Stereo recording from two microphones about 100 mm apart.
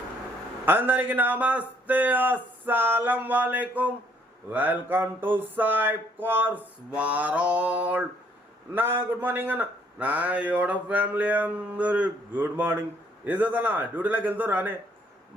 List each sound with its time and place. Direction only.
0.6 s a man's voice: 20° right (ahead or behind)